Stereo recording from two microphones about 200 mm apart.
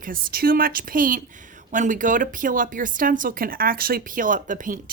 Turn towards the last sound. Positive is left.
turn(degrees=-40)  # may be behind; listen again after turning